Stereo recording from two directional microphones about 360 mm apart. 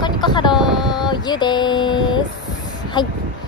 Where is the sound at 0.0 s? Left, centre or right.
Centre.